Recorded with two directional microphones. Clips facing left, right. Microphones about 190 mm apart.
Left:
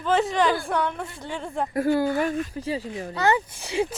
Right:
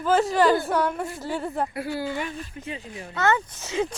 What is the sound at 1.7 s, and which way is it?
Speech, 50° left (ahead or behind).